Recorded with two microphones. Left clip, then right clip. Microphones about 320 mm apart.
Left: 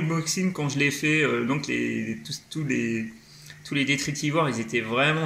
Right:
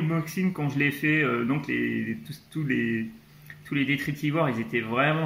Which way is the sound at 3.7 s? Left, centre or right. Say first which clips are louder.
Left 2 dB; centre.